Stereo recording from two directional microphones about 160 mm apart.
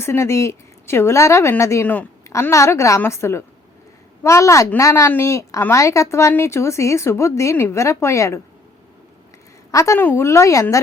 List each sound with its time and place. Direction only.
0.0 s a woman's voice: 15° left (ahead or behind)
9.7 s a woman's voice: 20° left (ahead or behind)